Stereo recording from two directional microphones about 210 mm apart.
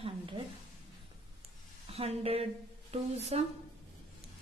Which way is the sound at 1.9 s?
30° right (ahead or behind).